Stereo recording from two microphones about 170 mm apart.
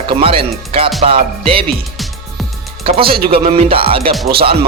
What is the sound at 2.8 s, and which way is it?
Speech, 35° right (ahead or behind).